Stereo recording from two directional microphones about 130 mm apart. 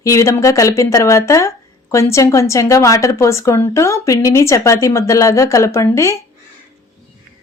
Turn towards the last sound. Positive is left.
turn(degrees=20)  # may be behind; listen again after turning